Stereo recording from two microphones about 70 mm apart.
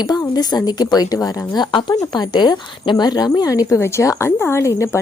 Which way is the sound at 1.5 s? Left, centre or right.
Left.